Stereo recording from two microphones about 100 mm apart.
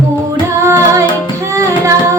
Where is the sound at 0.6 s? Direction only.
30° right (ahead or behind).